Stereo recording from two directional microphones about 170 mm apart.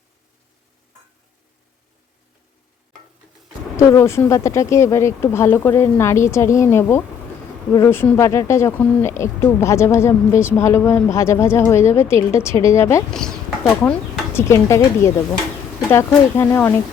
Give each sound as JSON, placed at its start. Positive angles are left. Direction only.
{"t": 3.8, "sound": "speech", "side_deg": 15}
{"t": 13.1, "sound": "speech", "side_deg": 5}
{"t": 14.3, "sound": "speech", "side_deg": 15}
{"t": 15.9, "sound": "speech", "side_deg": 15}